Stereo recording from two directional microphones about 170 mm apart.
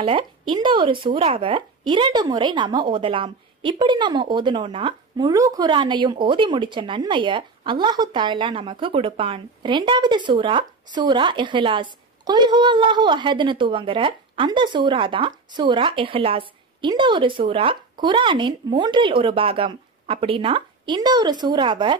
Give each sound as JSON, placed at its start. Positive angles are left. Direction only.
{"t": 0.0, "sound": "speech", "side_deg": -30}